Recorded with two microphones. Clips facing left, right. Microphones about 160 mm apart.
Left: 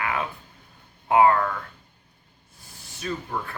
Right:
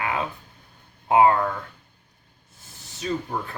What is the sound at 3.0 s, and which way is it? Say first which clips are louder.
Speech: right 4 dB; 20° right (ahead or behind).